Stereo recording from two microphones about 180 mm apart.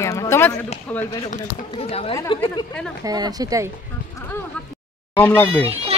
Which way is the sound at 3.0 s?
20° right (ahead or behind).